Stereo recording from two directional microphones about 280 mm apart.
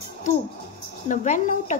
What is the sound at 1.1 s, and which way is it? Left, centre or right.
Speech, left.